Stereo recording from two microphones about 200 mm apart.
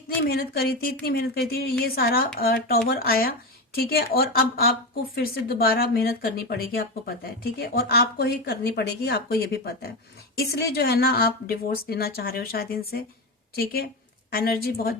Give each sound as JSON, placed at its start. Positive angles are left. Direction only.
{"t": 0.3, "sound": "a woman's voice", "side_deg": 50}
{"t": 14.3, "sound": "a woman's voice", "side_deg": 50}